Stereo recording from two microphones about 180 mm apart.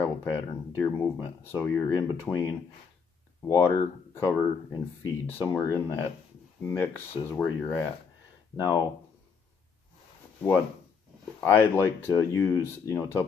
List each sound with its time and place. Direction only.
0.0 s speech: 15° left (ahead or behind)
11.4 s speech: 15° left (ahead or behind)